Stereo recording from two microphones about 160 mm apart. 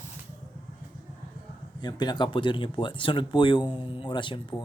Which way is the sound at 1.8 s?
25° left (ahead or behind).